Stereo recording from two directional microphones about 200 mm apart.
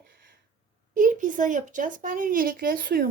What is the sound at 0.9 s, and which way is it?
Speech, 40° right (ahead or behind).